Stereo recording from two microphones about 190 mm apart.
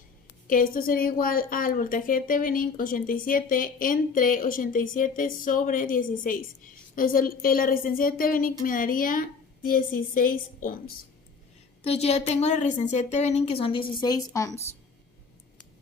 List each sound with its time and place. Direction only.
0.4 s a woman's voice: 45° left (ahead or behind)
11.8 s a woman's voice: 35° left (ahead or behind); by 14.6 s 20° left (ahead or behind)